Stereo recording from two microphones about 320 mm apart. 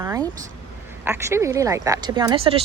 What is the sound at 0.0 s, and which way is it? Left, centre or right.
Vehicle, centre.